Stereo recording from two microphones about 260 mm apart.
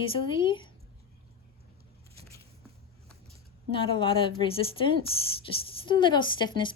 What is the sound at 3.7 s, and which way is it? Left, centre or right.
A woman's voice, centre.